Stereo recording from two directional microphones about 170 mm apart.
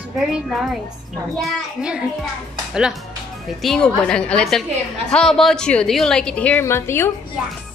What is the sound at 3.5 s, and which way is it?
A woman's voice, centre (ahead or behind).